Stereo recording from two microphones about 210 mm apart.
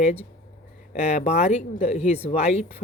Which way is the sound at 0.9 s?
30° left (ahead or behind).